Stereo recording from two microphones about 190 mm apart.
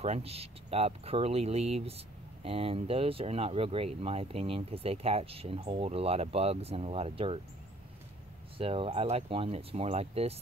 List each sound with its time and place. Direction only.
0.0 s speech: 35° right (ahead or behind)
8.5 s speech: 30° right (ahead or behind)